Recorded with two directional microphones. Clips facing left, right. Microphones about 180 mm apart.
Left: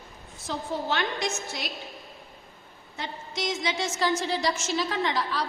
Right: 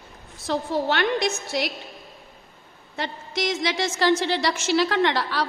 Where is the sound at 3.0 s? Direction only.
70° right (ahead or behind).